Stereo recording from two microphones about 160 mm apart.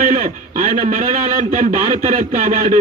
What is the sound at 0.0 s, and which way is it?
Speech, 50° right (ahead or behind).